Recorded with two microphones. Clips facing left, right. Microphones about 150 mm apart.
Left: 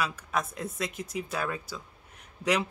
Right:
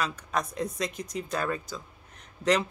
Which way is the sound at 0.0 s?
5° left (ahead or behind).